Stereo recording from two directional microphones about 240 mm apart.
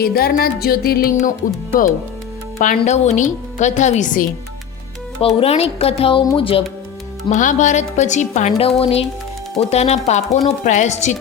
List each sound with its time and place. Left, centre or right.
0.0 s a woman's voice: left
2.6 s speech: left